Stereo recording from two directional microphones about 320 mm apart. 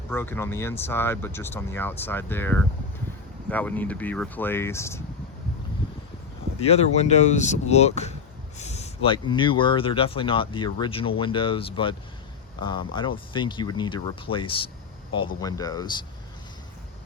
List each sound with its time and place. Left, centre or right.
0.1 s speech: centre
6.7 s speech: centre